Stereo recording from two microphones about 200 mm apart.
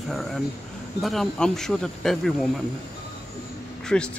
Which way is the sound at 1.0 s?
Centre (ahead or behind).